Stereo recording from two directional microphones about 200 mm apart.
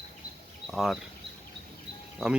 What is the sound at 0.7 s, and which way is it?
Speech, centre (ahead or behind).